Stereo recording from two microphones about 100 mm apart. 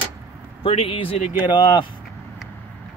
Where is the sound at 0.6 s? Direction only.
70° left (ahead or behind).